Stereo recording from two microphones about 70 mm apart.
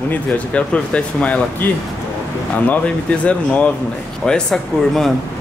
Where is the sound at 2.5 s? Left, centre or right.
Left.